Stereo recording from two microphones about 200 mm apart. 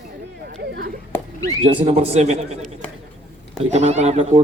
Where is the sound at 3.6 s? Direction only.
35° right (ahead or behind).